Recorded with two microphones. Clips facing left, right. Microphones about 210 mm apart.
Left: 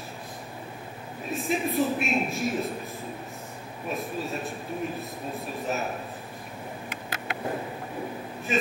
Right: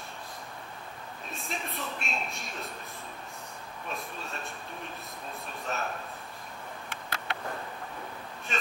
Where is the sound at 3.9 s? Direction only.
Centre (ahead or behind).